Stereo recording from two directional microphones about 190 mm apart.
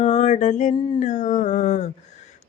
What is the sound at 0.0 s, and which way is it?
Mantra, 35° left (ahead or behind).